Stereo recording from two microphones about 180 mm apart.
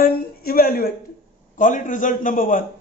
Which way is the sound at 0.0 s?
55° left (ahead or behind).